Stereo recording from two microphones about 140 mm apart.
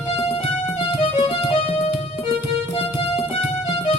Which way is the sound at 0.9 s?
40° left (ahead or behind).